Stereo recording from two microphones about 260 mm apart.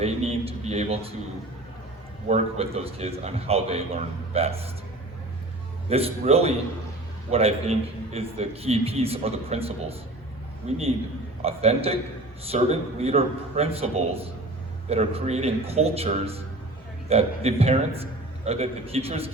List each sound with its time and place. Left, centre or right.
0.0 s a man's voice: right
2.2 s a man's voice: right
5.9 s a man's voice: right